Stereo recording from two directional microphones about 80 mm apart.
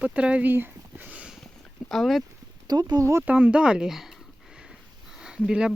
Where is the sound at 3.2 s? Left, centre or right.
Centre.